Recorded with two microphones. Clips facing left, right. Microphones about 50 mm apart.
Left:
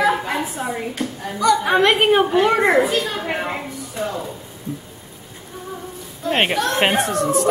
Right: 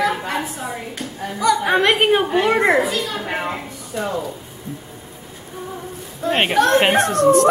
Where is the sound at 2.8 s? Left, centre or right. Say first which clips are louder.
Left 2 dB; left.